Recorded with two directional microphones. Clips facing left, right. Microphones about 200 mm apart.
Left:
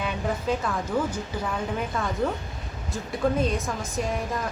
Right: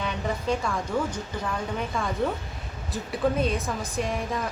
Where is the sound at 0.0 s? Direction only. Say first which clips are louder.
Left 1 dB; 5° left (ahead or behind).